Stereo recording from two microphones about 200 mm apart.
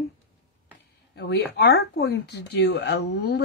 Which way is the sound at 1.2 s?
60° left (ahead or behind).